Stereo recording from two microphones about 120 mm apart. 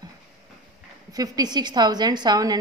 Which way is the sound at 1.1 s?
35° right (ahead or behind).